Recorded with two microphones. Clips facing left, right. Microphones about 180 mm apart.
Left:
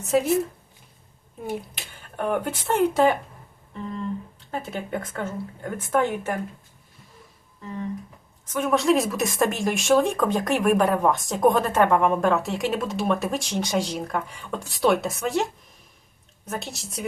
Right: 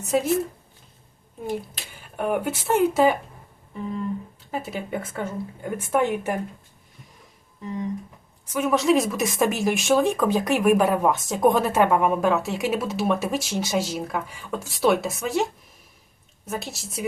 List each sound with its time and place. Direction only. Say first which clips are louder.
0.0 s speech: left 1 dB; centre (ahead or behind)
1.4 s a woman's voice: right 2 dB; centre (ahead or behind)
7.6 s a woman's voice: right 2 dB; 15° right (ahead or behind); by 15.4 s centre (ahead or behind)
16.5 s speech: right 1 dB; centre (ahead or behind)